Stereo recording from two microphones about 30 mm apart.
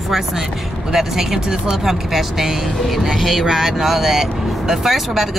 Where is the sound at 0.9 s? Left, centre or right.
Centre.